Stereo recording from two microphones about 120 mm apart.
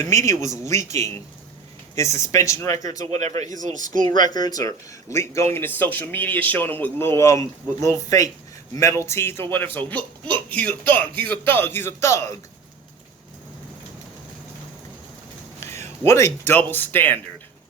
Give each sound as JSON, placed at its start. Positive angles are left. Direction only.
{"t": 0.3, "sound": "speech", "side_deg": 25}
{"t": 3.1, "sound": "speech", "side_deg": -70}
{"t": 3.6, "sound": "a man's voice", "side_deg": -90}
{"t": 4.3, "sound": "speech", "side_deg": 35}
{"t": 15.6, "sound": "a sound", "side_deg": 20}
{"t": 16.5, "sound": "speech", "side_deg": 15}